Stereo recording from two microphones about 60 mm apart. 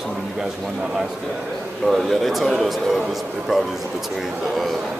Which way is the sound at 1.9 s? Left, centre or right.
Centre.